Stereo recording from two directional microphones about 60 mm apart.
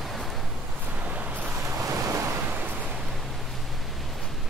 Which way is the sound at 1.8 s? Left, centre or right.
Right.